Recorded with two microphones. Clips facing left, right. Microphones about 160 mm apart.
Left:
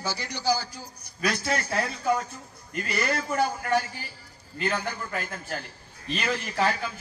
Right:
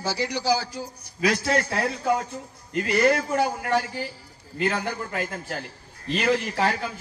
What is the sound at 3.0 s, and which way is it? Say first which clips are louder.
Speech: right 8 dB; 60° right (ahead or behind).